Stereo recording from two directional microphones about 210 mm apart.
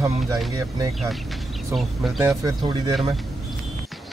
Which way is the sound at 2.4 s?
20° right (ahead or behind).